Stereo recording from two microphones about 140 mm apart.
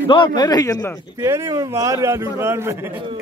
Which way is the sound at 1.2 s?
25° right (ahead or behind).